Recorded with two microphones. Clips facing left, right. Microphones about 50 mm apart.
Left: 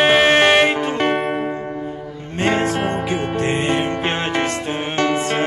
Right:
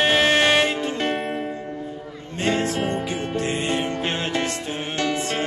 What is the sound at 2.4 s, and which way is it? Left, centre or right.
Music, left.